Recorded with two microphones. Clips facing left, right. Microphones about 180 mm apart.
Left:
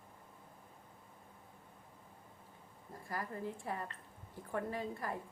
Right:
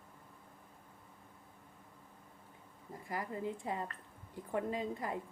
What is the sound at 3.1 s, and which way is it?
A woman's voice, 20° right (ahead or behind).